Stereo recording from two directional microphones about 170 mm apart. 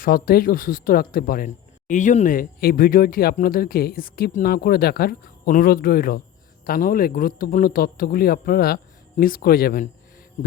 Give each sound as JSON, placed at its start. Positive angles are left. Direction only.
{"t": 0.0, "sound": "speech", "side_deg": 60}